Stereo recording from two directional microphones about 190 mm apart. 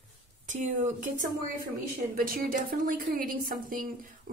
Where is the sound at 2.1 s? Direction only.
50° right (ahead or behind).